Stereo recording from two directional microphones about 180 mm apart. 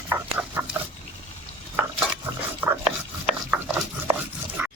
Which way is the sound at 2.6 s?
10° right (ahead or behind).